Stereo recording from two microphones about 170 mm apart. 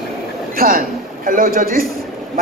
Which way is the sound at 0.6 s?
55° right (ahead or behind).